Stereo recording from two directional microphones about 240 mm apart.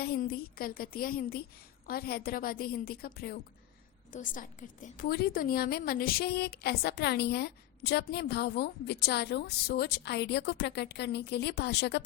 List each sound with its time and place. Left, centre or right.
0.0 s a woman's voice: left